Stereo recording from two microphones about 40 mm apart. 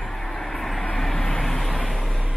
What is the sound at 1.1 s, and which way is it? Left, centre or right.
Vehicle, left.